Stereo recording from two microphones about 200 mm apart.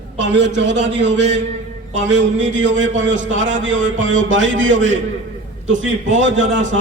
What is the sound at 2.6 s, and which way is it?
Speech, 35° right (ahead or behind).